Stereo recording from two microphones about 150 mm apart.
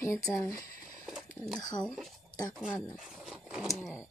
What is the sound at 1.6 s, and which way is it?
Speech, 25° left (ahead or behind).